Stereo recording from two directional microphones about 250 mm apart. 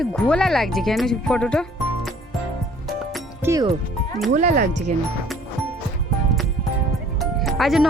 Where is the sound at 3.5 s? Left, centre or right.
Centre.